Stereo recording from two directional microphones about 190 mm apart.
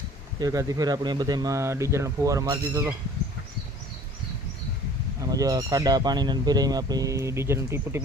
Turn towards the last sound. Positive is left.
turn(degrees=-15)  # may be behind; listen again after turning